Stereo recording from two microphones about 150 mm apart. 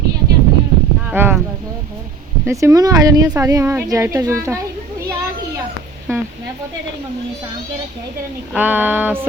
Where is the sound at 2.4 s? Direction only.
20° right (ahead or behind).